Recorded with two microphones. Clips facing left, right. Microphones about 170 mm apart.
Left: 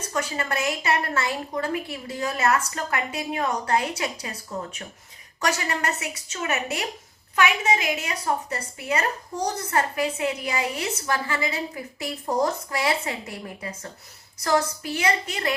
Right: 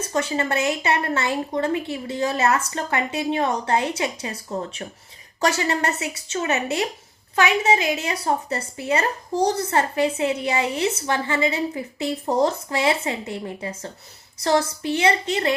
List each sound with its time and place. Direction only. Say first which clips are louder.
0.1 s a woman's voice: right 4 dB; 25° right (ahead or behind)